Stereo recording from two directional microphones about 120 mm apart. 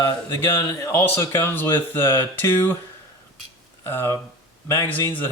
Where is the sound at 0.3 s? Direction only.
20° left (ahead or behind).